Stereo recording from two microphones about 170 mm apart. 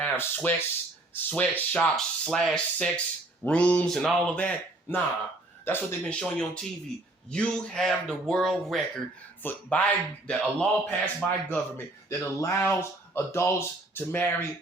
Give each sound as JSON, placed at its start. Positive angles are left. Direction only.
{"t": 0.0, "sound": "a man's voice", "side_deg": 10}